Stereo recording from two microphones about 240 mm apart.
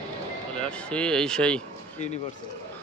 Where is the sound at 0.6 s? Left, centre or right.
Centre.